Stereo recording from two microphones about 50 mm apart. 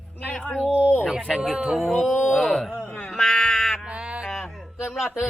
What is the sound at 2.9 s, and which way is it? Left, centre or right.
Music, left.